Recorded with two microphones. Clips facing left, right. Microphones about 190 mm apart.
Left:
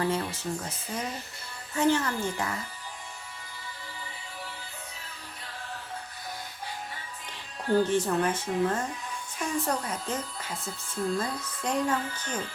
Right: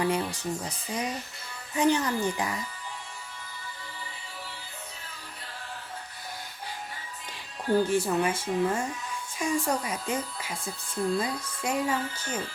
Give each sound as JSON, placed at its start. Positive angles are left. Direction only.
{"t": 0.0, "sound": "speech", "side_deg": -15}
{"t": 7.7, "sound": "speech", "side_deg": -10}